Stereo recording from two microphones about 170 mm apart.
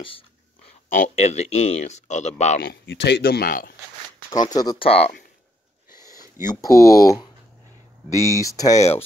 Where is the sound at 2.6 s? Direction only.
75° left (ahead or behind); by 3.7 s 60° left (ahead or behind).